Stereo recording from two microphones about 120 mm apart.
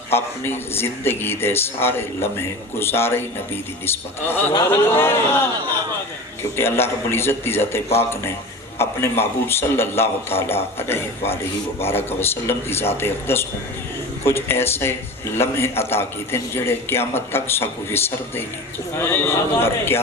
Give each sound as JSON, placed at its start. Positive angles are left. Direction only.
{"t": 0.1, "sound": "a man's voice", "side_deg": 20}
{"t": 6.6, "sound": "a man's voice", "side_deg": 20}
{"t": 8.8, "sound": "a man's voice", "side_deg": 20}